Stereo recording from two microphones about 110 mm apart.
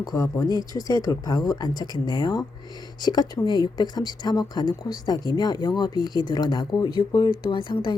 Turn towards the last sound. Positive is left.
turn(degrees=50)  # may be behind; listen again after turning